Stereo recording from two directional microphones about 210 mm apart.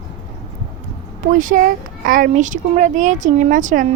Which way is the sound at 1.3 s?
40° right (ahead or behind).